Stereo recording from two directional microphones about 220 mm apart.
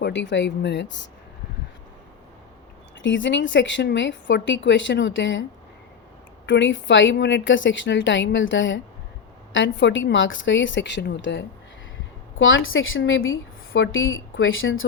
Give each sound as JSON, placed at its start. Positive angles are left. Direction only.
{"t": 0.0, "sound": "speech", "side_deg": 55}
{"t": 3.0, "sound": "a woman's voice", "side_deg": 55}